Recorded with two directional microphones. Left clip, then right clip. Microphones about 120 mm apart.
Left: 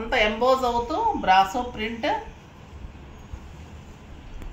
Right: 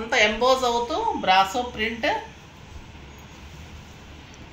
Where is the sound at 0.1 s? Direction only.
5° left (ahead or behind).